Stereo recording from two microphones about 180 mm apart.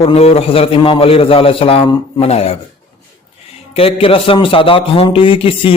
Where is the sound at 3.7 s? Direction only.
30° left (ahead or behind).